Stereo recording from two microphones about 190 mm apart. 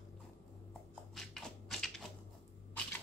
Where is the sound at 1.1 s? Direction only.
Centre (ahead or behind).